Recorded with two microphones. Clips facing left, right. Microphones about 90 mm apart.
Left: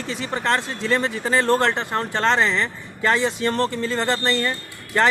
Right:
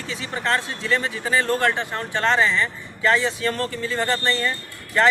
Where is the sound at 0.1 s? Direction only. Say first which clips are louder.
Left 1 dB; 35° left (ahead or behind).